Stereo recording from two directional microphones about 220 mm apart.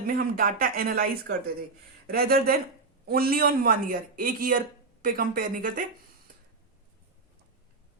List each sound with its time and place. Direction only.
0.1 s a man's voice: 40° right (ahead or behind)